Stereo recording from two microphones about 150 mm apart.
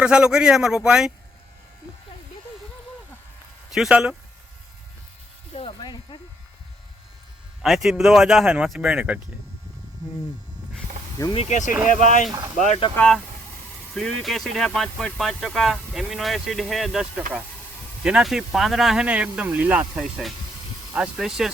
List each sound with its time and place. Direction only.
0.0 s speech: 5° right (ahead or behind)
3.7 s speech: 5° right (ahead or behind)
5.5 s speech: 35° left (ahead or behind)
7.6 s speech: centre (ahead or behind)
11.3 s speech: 45° left (ahead or behind)
13.0 s speech: 5° left (ahead or behind)